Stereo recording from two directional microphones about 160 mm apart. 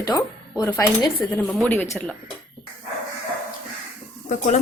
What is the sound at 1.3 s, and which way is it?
Speech, 5° left (ahead or behind).